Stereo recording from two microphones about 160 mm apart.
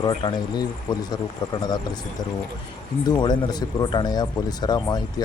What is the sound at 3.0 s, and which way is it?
Speech, 25° left (ahead or behind).